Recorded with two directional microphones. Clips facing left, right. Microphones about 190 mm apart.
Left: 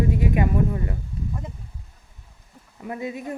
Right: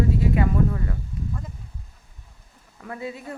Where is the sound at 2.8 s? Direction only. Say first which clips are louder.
Left 3 dB; 15° left (ahead or behind).